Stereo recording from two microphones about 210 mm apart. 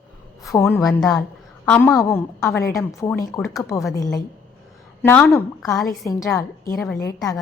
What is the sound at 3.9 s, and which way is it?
A woman's voice, 15° left (ahead or behind).